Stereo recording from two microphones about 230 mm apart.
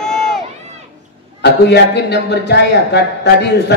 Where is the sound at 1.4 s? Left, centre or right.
Left.